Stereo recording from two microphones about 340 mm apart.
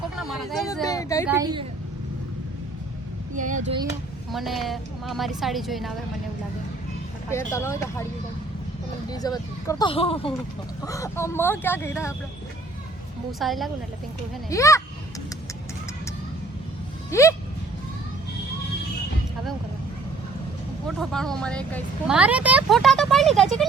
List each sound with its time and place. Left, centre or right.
0.2 s speech: centre
1.3 s a woman's voice: centre
3.3 s speech: right
4.3 s speech: centre
7.3 s speech: centre
9.0 s speech: centre
13.4 s speech: centre
17.1 s a sound: centre
21.0 s a woman's voice: centre